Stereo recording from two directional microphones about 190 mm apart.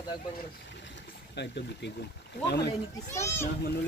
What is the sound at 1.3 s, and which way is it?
Speech, 65° left (ahead or behind).